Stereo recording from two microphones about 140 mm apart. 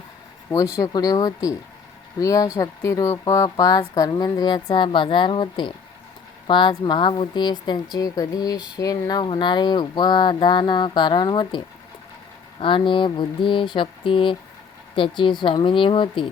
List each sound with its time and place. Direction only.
0.8 s speech: 25° left (ahead or behind)